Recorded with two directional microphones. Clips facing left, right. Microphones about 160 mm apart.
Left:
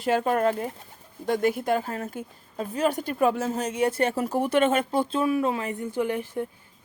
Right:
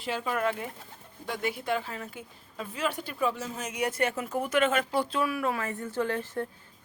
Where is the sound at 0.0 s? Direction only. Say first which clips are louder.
Left 7 dB; 45° left (ahead or behind).